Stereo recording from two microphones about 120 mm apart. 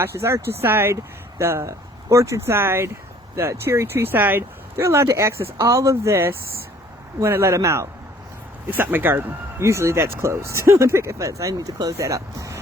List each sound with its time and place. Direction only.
0.0 s speech: 25° right (ahead or behind)